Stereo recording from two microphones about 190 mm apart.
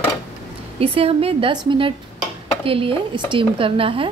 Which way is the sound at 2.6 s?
30° right (ahead or behind).